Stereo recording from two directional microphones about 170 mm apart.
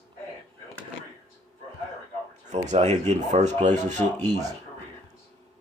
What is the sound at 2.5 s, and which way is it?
Speech, 40° right (ahead or behind).